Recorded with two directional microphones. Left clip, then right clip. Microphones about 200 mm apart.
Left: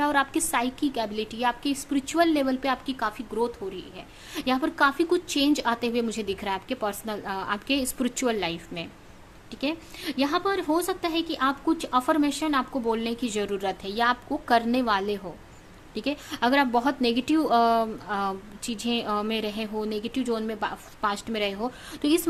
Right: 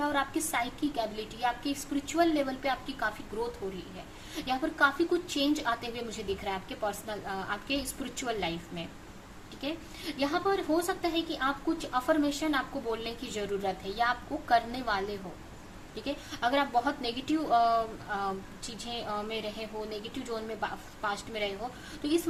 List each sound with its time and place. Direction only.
0.0 s a woman's voice: 50° left (ahead or behind)
4.4 s a woman's voice: 50° left (ahead or behind)